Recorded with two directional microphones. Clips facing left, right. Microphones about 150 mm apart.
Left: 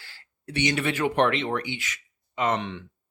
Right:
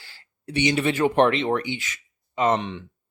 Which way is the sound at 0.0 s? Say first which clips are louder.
Right 3 dB; 25° right (ahead or behind).